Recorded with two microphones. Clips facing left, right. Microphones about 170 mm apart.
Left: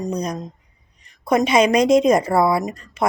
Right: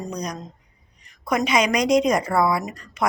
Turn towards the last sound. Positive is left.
turn(degrees=25)  # may be behind; listen again after turning